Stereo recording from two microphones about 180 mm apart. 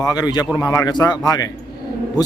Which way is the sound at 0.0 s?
20° left (ahead or behind).